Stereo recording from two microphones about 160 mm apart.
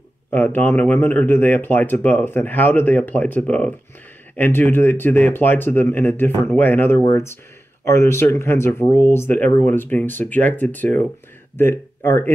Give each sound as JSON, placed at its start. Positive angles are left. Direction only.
{"t": 0.3, "sound": "speech", "side_deg": 15}